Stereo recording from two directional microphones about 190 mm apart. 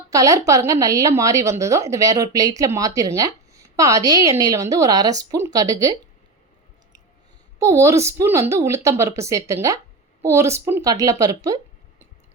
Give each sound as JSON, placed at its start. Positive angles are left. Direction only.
{"t": 0.1, "sound": "a woman's voice", "side_deg": -20}
{"t": 7.6, "sound": "a woman's voice", "side_deg": -15}